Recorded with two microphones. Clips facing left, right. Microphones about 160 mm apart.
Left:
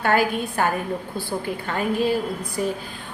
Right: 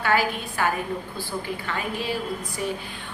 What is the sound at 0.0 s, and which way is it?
A woman's voice, 50° left (ahead or behind).